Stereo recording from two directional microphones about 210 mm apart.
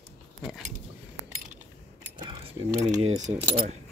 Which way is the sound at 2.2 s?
25° right (ahead or behind).